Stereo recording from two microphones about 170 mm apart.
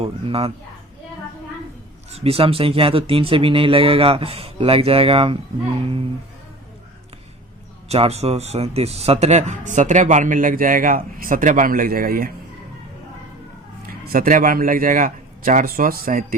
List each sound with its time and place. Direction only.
0.0 s speech: 35° right (ahead or behind)
2.1 s speech: 35° right (ahead or behind)
7.9 s speech: 35° right (ahead or behind); by 12.3 s 55° right (ahead or behind)
14.0 s a man's voice: 55° right (ahead or behind)